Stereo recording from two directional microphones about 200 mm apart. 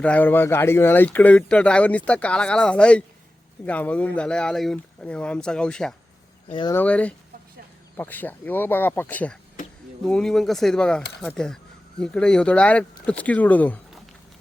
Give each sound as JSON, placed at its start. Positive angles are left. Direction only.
{"t": 0.0, "sound": "speech", "side_deg": 10}
{"t": 6.5, "sound": "speech", "side_deg": 25}
{"t": 6.7, "sound": "speech", "side_deg": 5}